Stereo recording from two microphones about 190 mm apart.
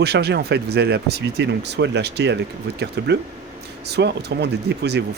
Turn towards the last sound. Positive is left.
turn(degrees=-60)  # may be behind; listen again after turning